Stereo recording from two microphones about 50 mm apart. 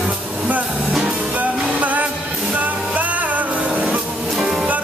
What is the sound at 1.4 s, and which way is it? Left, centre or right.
Music, right.